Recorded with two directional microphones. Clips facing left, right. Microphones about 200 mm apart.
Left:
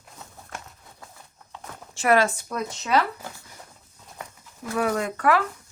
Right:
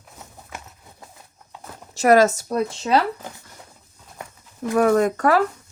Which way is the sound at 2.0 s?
40° right (ahead or behind).